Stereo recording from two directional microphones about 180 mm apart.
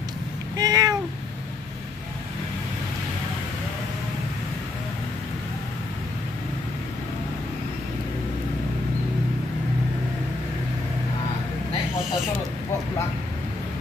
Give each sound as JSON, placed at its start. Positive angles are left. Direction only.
{"t": 0.6, "sound": "cat", "side_deg": -20}